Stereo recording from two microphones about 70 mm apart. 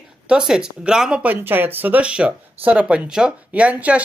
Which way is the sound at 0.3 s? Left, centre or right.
Centre.